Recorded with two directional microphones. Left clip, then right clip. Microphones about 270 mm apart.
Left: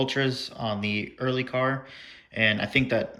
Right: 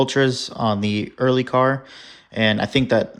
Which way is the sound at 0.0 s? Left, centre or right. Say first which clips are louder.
Right 8 dB; centre.